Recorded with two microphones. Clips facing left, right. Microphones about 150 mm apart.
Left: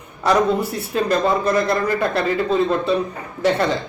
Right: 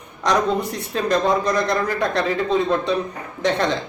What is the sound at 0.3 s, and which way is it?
A man's voice, 5° left (ahead or behind).